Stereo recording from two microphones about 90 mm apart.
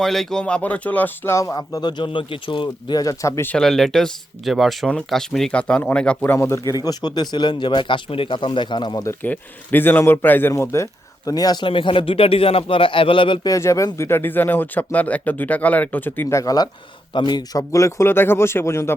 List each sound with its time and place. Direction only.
0.0 s speech: 5° left (ahead or behind); by 2.9 s 70° left (ahead or behind)
2.9 s speech: 40° left (ahead or behind)
3.6 s speech: 5° left (ahead or behind)
6.2 s speech: 30° left (ahead or behind)
6.7 s speech: 45° left (ahead or behind)
9.2 s speech: 20° left (ahead or behind)
11.3 s speech: 45° left (ahead or behind)
11.6 s speech: 75° left (ahead or behind)
13.4 s speech: 35° left (ahead or behind)
16.3 s speech: 40° left (ahead or behind)
17.2 s speech: 55° left (ahead or behind); by 18.9 s 30° left (ahead or behind)